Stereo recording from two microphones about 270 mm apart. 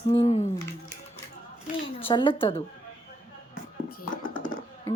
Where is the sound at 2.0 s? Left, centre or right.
Centre.